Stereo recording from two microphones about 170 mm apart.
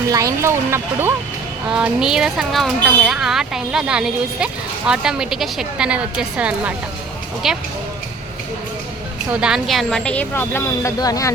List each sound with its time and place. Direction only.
0.1 s speech: 20° right (ahead or behind); by 7.6 s centre (ahead or behind)
9.3 s speech: 5° right (ahead or behind); by 11.3 s 20° left (ahead or behind)